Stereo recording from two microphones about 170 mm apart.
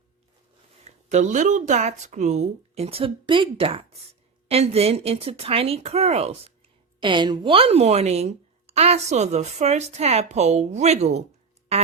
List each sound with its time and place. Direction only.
0.9 s a woman's voice: 45° right (ahead or behind)
7.0 s a woman's voice: 25° right (ahead or behind)